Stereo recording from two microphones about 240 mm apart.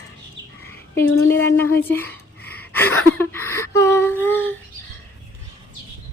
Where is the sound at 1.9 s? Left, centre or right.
Centre.